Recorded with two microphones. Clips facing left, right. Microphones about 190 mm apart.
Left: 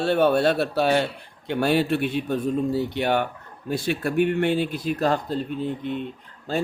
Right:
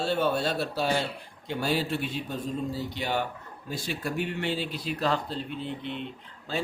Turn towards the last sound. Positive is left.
turn(degrees=45)  # may be behind; listen again after turning